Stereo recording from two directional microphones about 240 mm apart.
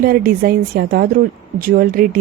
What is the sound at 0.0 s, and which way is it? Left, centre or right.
A woman's voice, right.